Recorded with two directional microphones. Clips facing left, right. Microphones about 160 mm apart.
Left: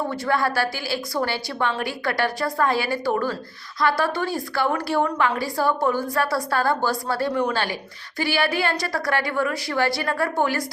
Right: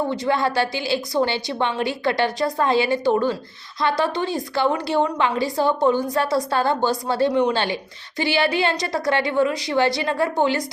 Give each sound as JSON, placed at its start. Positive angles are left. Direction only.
{"t": 0.1, "sound": "a woman's voice", "side_deg": -20}